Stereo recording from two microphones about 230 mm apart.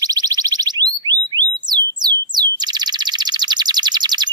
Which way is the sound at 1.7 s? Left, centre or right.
Centre.